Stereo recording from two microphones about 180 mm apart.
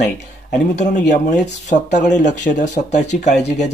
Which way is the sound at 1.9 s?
45° left (ahead or behind).